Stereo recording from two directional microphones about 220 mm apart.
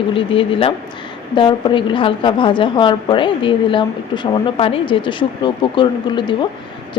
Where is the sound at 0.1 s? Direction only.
25° left (ahead or behind).